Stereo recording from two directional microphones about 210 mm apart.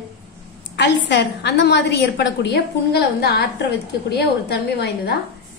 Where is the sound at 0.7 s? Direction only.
55° left (ahead or behind).